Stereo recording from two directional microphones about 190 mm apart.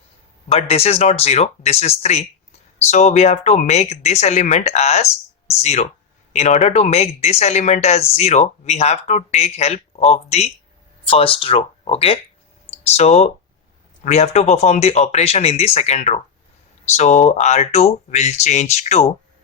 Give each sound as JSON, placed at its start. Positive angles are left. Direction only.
{"t": 0.4, "sound": "speech", "side_deg": 30}